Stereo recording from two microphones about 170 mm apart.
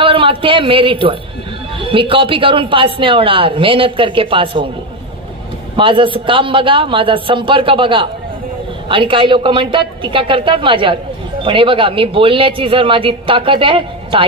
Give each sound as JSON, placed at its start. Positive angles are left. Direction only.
{"t": 0.0, "sound": "a man's voice", "side_deg": -30}
{"t": 5.8, "sound": "a woman's voice", "side_deg": -30}